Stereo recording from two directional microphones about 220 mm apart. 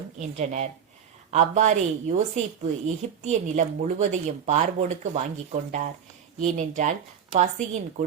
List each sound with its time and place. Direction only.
0.2 s a woman's voice: 30° right (ahead or behind)